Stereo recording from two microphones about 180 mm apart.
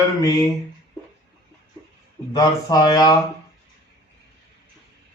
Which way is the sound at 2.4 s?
20° left (ahead or behind).